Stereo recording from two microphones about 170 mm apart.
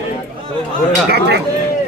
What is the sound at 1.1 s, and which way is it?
Speech, 80° right.